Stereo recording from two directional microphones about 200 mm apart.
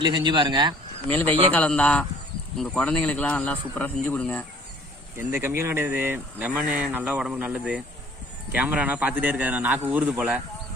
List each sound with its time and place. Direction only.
0.3 s speech: 20° right (ahead or behind)
1.5 s a man's voice: 5° left (ahead or behind)
5.1 s speech: 10° right (ahead or behind)